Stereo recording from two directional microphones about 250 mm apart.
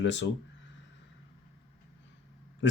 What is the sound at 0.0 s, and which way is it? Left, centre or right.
Speech, left.